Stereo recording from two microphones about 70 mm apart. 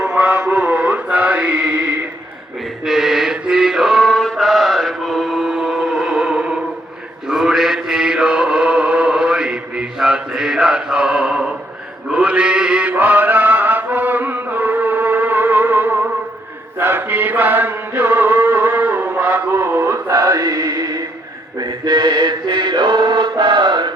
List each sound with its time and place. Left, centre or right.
0.0 s mantra: centre
3.4 s chant: centre
7.3 s mantra: centre
12.9 s mantra: right
16.7 s chant: right
21.6 s mantra: right